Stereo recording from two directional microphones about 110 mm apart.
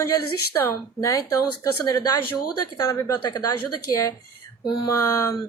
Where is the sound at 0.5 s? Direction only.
30° left (ahead or behind).